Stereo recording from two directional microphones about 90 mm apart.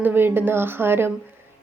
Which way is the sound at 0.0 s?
25° right (ahead or behind).